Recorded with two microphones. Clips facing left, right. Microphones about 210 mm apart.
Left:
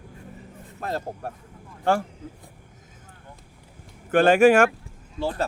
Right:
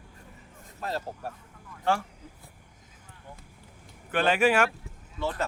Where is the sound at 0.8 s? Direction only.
50° left (ahead or behind).